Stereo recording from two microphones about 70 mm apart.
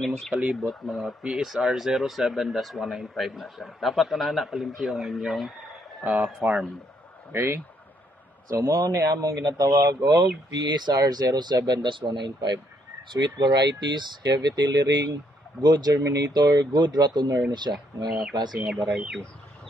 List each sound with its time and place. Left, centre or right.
0.6 s speech: centre
7.3 s speech: right
9.0 s a man's voice: right
10.0 s speech: right
15.6 s speech: right
18.6 s speech: centre